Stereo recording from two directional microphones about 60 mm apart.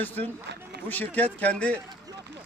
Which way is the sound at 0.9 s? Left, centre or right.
Left.